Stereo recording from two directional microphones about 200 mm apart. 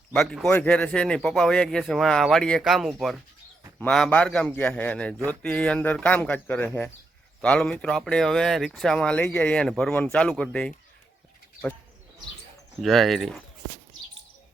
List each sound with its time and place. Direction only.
0.1 s speech: centre (ahead or behind)
12.8 s speech: centre (ahead or behind)